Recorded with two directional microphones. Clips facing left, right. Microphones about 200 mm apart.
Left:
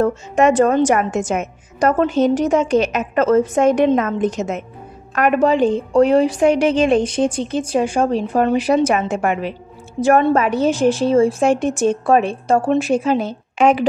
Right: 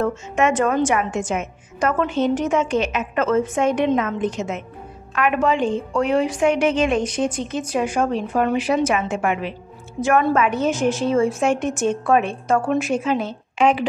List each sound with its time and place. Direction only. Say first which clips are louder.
0.0 s a woman's voice: left 5 dB; 35° left (ahead or behind)